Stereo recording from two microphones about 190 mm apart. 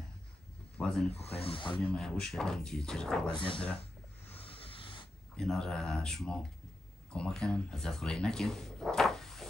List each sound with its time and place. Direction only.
0.7 s speech: 5° left (ahead or behind)
1.1 s speech: 30° left (ahead or behind)
1.8 s speech: 5° left (ahead or behind)
3.3 s speech: 25° left (ahead or behind)
4.4 s a sound: 30° left (ahead or behind)
5.3 s speech: 5° left (ahead or behind)